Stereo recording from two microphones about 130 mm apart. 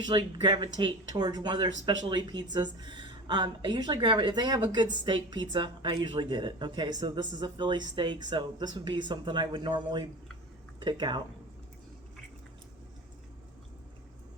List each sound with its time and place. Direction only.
0.0 s a woman's voice: 35° right (ahead or behind)